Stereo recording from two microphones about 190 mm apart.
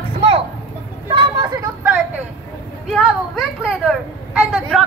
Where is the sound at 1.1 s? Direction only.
25° right (ahead or behind).